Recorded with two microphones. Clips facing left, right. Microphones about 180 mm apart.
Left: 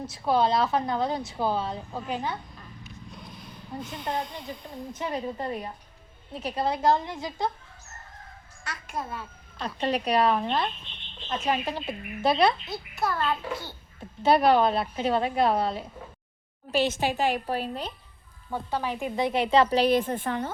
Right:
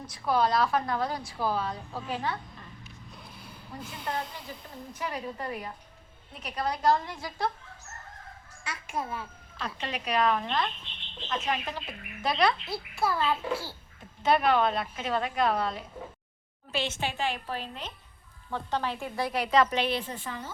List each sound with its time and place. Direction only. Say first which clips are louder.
0.0 s a woman's voice: left 3 dB; 25° left (ahead or behind)
3.1 s a sound: left 2 dB; 5° right (ahead or behind)
4.9 s a woman's voice: left 4 dB; 25° left (ahead or behind)
8.6 s a child's voice: even; 10° right (ahead or behind)
9.6 s a woman's voice: left 8 dB; 35° left (ahead or behind)
12.6 s a child's voice: even; 5° right (ahead or behind)
14.2 s a woman's voice: left 4 dB; 35° left (ahead or behind)
18.5 s a woman's voice: left 2 dB; 10° left (ahead or behind); by 20.5 s 60° left (ahead or behind)